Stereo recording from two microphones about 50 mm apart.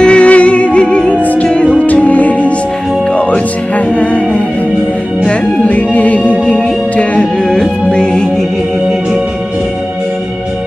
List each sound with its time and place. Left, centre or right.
0.0 s music: left
1.2 s music: left
7.2 s music: centre